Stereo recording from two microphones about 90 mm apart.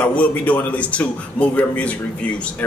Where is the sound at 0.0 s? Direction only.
15° left (ahead or behind).